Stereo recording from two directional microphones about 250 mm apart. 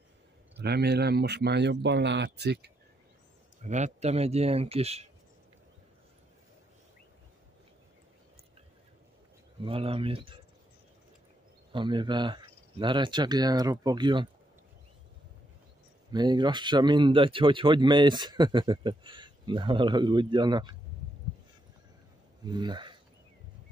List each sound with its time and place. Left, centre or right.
0.6 s speech: right
3.6 s speech: right
9.6 s speech: right
11.7 s speech: centre
16.1 s speech: centre
22.4 s speech: centre